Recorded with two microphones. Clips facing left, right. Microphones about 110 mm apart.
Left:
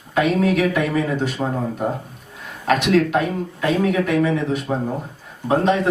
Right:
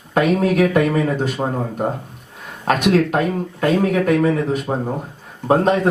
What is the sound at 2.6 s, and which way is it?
Speech, 40° right (ahead or behind).